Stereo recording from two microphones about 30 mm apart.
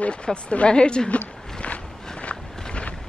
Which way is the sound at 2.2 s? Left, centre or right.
Left.